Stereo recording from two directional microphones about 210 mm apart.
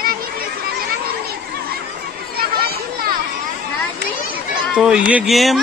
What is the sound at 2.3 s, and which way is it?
Chatter, 45° right (ahead or behind).